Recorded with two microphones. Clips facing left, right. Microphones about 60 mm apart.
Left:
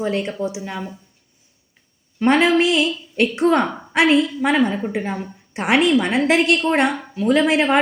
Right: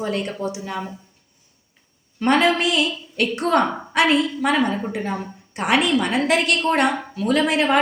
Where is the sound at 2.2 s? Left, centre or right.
Centre.